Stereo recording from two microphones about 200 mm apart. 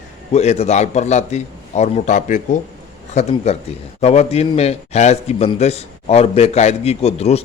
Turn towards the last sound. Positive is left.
turn(degrees=30)  # may be behind; listen again after turning